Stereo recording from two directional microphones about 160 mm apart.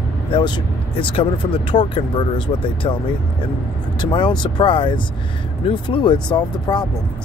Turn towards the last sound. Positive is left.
turn(degrees=30)  # may be behind; listen again after turning